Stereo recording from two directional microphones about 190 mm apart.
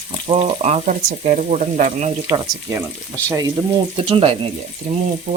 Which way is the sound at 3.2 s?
15° right (ahead or behind).